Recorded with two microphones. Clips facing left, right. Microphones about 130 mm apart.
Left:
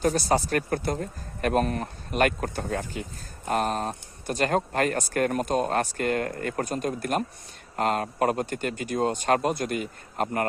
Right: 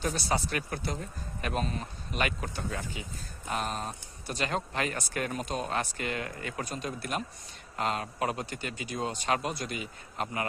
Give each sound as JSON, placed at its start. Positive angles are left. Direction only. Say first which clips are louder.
{"t": 0.0, "sound": "speech", "louder": "left 7 dB", "side_deg": 45}